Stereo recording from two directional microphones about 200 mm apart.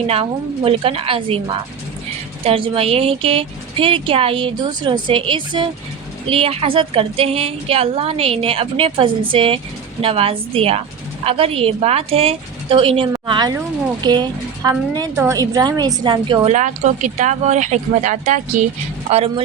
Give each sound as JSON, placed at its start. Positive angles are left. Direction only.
{"t": 0.1, "sound": "speech", "side_deg": -30}
{"t": 2.4, "sound": "speech", "side_deg": -30}
{"t": 16.6, "sound": "speech", "side_deg": -35}